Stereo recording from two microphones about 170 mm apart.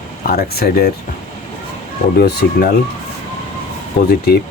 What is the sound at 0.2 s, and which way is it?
Speech, 65° left (ahead or behind).